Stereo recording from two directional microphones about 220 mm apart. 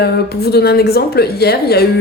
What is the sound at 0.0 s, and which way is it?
A woman's voice, 45° left (ahead or behind).